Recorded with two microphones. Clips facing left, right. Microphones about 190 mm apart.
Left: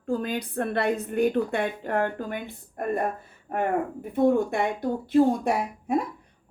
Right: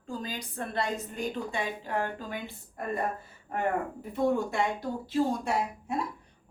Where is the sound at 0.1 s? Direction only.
60° left (ahead or behind).